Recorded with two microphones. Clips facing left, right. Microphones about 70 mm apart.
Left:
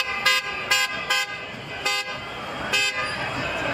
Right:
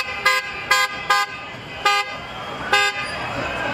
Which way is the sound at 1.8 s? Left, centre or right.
Right.